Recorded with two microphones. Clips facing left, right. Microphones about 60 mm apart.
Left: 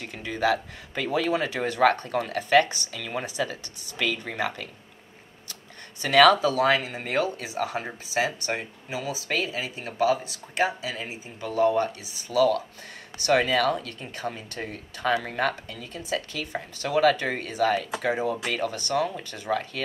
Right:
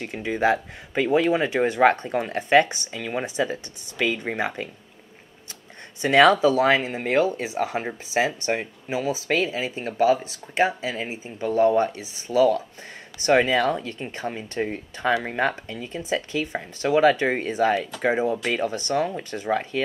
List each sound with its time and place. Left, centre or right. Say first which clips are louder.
0.0 s speech: right 4 dB; right
6.0 s speech: right 2 dB; right
13.9 s speech: right 3 dB; right